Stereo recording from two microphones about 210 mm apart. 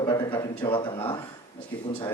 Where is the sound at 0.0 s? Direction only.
20° left (ahead or behind).